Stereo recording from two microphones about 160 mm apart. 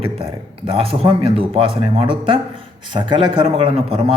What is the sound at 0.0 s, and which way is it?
Speech, 35° right (ahead or behind).